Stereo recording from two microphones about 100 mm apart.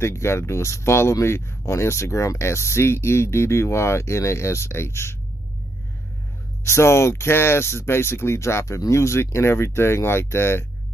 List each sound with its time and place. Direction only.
0.0 s speech: 25° left (ahead or behind)
6.6 s speech: 30° left (ahead or behind)